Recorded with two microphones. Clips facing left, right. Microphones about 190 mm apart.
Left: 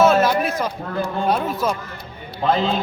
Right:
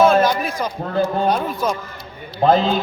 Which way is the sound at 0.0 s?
5° left (ahead or behind).